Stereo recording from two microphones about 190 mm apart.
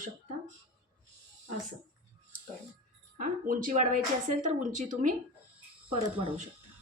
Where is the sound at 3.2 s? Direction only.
45° right (ahead or behind).